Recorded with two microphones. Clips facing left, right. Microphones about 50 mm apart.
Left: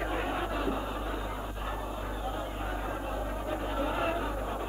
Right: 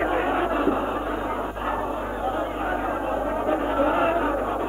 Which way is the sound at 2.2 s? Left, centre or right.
Right.